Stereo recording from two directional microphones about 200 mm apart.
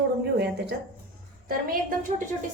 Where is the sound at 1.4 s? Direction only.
45° right (ahead or behind).